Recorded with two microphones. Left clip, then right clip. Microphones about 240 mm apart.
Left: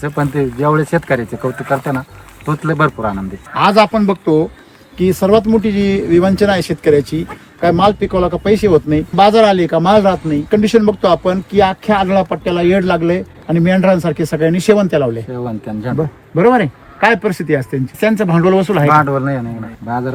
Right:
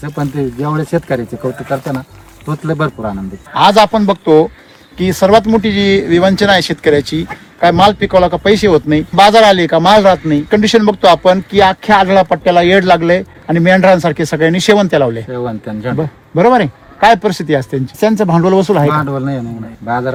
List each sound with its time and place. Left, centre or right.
0.0 s speech: centre
2.5 s speech: centre
3.5 s speech: right
15.3 s speech: centre
16.0 s speech: right
18.9 s speech: centre